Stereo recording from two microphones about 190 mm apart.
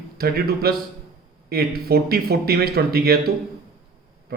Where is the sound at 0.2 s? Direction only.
55° right (ahead or behind).